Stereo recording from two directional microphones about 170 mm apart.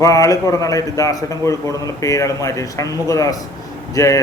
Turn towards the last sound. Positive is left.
turn(degrees=20)  # may be behind; listen again after turning